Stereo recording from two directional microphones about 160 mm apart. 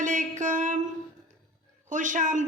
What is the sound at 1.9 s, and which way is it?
Speech, 55° right (ahead or behind).